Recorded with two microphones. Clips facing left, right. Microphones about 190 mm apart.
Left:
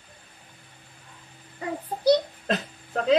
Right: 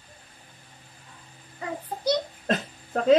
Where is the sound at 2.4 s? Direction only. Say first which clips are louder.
Right 1 dB; 45° right (ahead or behind).